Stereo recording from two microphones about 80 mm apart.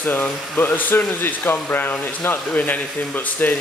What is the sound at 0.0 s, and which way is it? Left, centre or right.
Speech, left.